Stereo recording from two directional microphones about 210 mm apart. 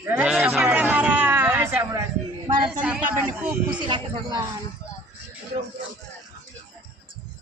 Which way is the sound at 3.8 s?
20° right (ahead or behind).